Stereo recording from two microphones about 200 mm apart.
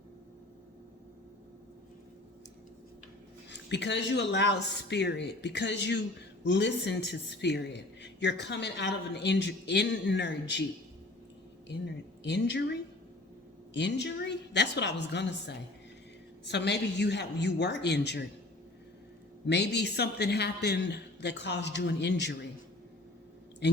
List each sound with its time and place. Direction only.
3.5 s speech: 60° left (ahead or behind)
12.2 s speech: 60° left (ahead or behind)
13.7 s speech: 60° left (ahead or behind)
19.5 s speech: 55° left (ahead or behind)